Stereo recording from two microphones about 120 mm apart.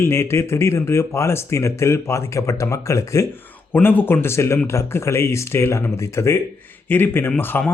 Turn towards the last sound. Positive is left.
turn(degrees=15)  # may be behind; listen again after turning